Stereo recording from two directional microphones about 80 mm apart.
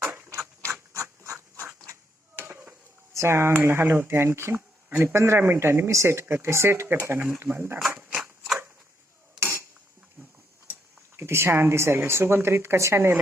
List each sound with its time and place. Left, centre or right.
0.0 s mechanisms: right
0.3 s ratchet: right
1.9 s a sound: right
3.1 s speech: right
7.8 s a sound: centre
9.4 s dishes: right
11.2 s speech: right